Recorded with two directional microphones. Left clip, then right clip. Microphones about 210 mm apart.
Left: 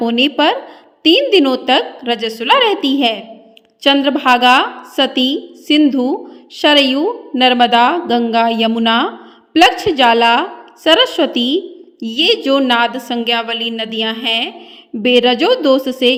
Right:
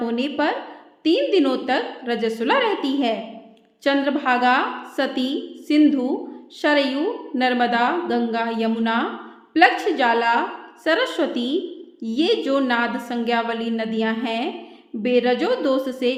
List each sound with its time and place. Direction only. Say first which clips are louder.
0.0 s a woman's voice: left 9 dB; 40° left (ahead or behind)